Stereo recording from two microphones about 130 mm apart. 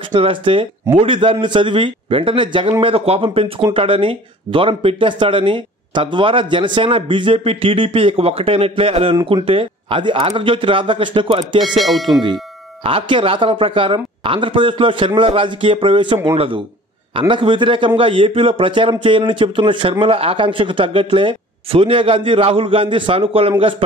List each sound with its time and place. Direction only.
0.1 s a man's voice: 40° right (ahead or behind)
11.8 s speech: centre (ahead or behind)
12.8 s a man's voice: 45° right (ahead or behind)